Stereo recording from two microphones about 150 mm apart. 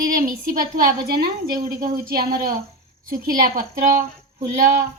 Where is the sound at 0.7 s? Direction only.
90° right.